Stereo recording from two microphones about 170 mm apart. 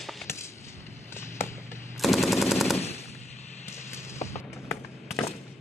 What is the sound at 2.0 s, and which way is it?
Machine gun, centre (ahead or behind).